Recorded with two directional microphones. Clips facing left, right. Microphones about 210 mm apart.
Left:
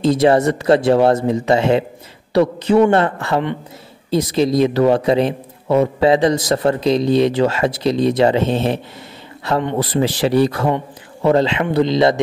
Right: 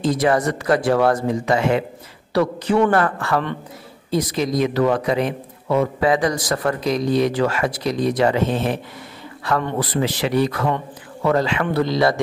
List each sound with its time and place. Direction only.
0.0 s a man's voice: 25° left (ahead or behind)